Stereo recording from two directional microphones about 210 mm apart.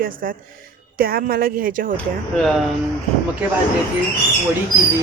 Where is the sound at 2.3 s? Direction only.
Centre (ahead or behind).